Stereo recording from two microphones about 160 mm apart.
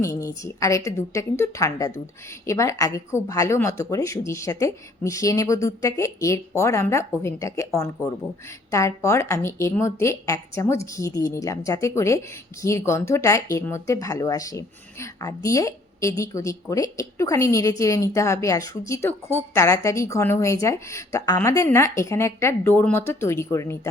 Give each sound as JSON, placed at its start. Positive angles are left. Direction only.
{"t": 0.0, "sound": "a woman's voice", "side_deg": 20}